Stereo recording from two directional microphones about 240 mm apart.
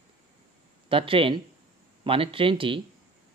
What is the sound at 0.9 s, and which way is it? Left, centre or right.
Speech, right.